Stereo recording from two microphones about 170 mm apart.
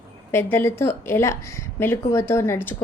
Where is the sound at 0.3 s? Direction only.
10° left (ahead or behind).